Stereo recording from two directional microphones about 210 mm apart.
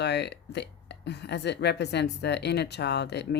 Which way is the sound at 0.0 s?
50° left (ahead or behind).